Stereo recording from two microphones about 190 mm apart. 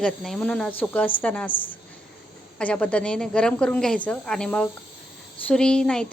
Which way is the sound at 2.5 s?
5° left (ahead or behind).